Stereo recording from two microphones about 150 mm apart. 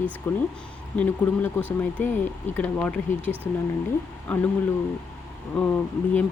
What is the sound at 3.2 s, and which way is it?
Speech, 10° right (ahead or behind).